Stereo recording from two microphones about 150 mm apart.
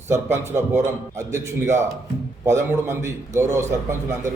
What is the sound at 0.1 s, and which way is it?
A man's voice, 15° right (ahead or behind).